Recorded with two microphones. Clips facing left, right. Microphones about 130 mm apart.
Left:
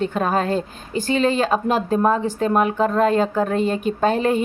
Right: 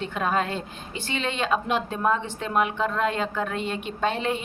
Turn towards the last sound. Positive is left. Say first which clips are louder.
# left 8 dB
turn(degrees=45)  # may be behind; listen again after turning